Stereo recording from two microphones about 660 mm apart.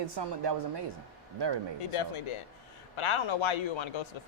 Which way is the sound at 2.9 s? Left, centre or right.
Left.